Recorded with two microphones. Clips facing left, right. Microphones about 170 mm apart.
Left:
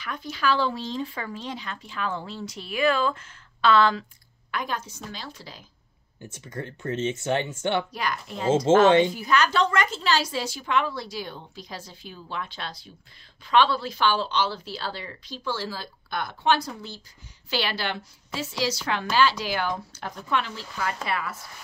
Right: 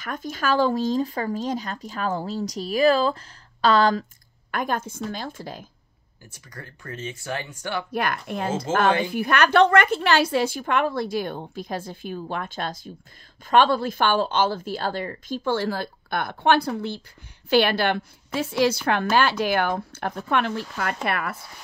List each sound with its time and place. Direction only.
0.0 s a woman's voice: 45° right (ahead or behind)
6.2 s speech: 25° left (ahead or behind)
7.9 s a woman's voice: 55° right (ahead or behind)
8.8 s speech: 25° left (ahead or behind)
9.1 s a woman's voice: 60° right (ahead or behind)